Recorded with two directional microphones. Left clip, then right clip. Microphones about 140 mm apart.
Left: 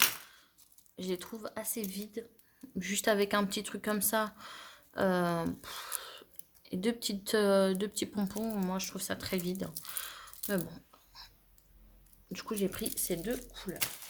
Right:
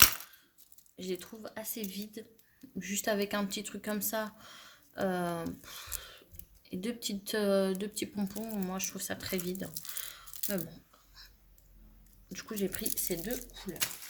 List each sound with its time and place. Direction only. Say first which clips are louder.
0.9 s speech: left 1 dB; 45° left (ahead or behind)
8.5 s speech: left 1 dB; 35° left (ahead or behind)
9.9 s a sound: left 1 dB; 45° left (ahead or behind)
12.3 s speech: left 2 dB; 40° left (ahead or behind)